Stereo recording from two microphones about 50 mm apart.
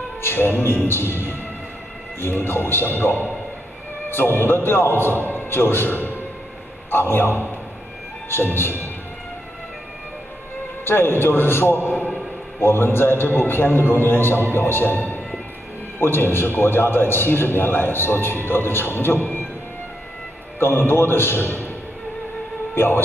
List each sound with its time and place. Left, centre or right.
0.2 s a man's voice: left
10.9 s a man's voice: left
20.5 s a man's voice: left
22.8 s a man's voice: left